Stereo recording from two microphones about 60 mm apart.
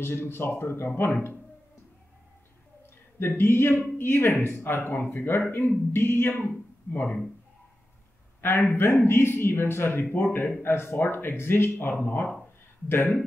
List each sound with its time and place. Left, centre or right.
0.0 s speech: left
3.2 s speech: left
8.4 s speech: left
12.0 s speech: left
12.8 s speech: left